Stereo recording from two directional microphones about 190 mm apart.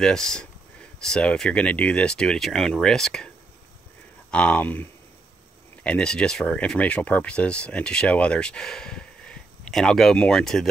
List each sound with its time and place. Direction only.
0.0 s speech: 5° left (ahead or behind)
4.3 s speech: 5° left (ahead or behind)
5.9 s speech: 5° left (ahead or behind)